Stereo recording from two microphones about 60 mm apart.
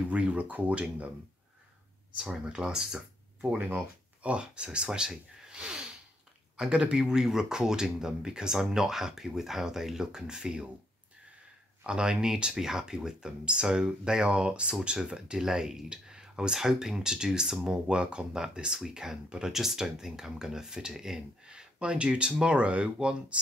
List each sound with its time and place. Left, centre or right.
0.0 s speech: right
2.3 s speech: centre
3.4 s speech: right
11.8 s speech: centre